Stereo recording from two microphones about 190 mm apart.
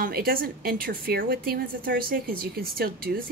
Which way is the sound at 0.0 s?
55° right (ahead or behind).